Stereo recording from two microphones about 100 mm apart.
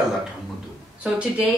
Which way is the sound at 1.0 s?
10° right (ahead or behind).